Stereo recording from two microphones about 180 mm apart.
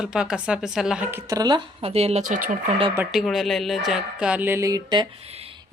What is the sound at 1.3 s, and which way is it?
Speech, 20° right (ahead or behind).